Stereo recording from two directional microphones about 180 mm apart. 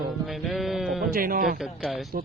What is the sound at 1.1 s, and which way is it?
Speech, 50° right (ahead or behind).